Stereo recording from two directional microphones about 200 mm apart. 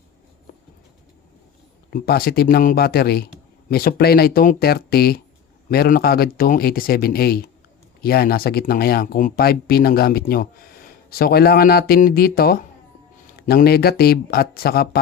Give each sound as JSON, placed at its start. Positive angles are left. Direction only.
{"t": 1.9, "sound": "speech", "side_deg": 50}